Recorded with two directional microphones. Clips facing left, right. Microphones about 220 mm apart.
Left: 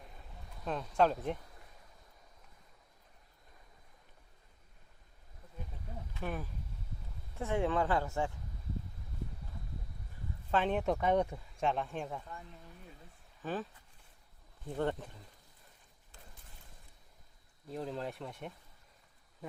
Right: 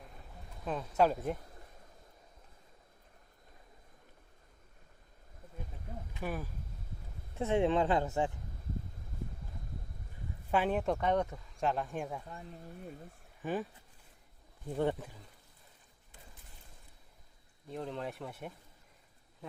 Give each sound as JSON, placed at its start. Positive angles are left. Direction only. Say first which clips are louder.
{"t": 0.6, "sound": "speech", "louder": "right 1 dB", "side_deg": -5}
{"t": 6.1, "sound": "speech", "louder": "right 1 dB", "side_deg": -10}
{"t": 7.3, "sound": "speech", "louder": "right 3 dB", "side_deg": -20}
{"t": 10.5, "sound": "speech", "louder": "right 1 dB", "side_deg": -5}
{"t": 11.5, "sound": "speech", "louder": "right 1 dB", "side_deg": 0}
{"t": 12.3, "sound": "speech", "louder": "right 3 dB", "side_deg": -35}
{"t": 13.4, "sound": "speech", "louder": "right 2 dB", "side_deg": -15}
{"t": 14.8, "sound": "speech", "louder": "right 2 dB", "side_deg": -10}
{"t": 17.7, "sound": "speech", "louder": "even", "side_deg": 0}